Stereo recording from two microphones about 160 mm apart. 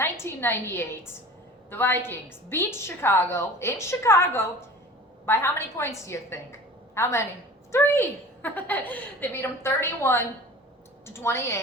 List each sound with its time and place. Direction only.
0.0 s a woman's voice: 15° left (ahead or behind)